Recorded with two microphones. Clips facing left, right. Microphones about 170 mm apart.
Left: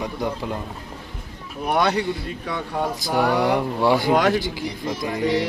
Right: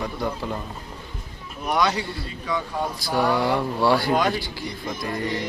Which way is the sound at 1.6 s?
55° left (ahead or behind).